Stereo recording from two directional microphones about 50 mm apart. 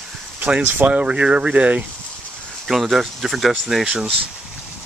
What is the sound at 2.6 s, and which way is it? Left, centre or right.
Speech, centre.